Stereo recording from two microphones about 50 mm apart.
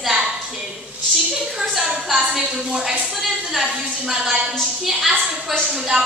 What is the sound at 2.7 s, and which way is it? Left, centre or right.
A woman's voice, centre.